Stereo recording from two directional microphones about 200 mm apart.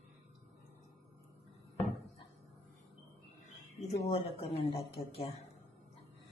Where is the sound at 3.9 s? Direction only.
30° left (ahead or behind).